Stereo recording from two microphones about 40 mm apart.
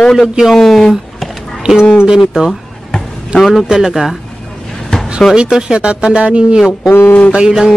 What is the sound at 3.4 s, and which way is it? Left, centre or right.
Speech, centre.